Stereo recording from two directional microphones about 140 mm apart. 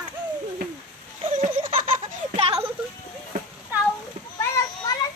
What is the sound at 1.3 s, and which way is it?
Laughter, 65° right (ahead or behind).